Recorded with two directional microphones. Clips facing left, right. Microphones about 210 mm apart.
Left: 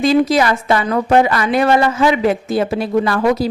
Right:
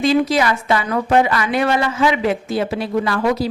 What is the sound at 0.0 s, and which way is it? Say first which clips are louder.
A woman's voice: left 3 dB; 40° left (ahead or behind).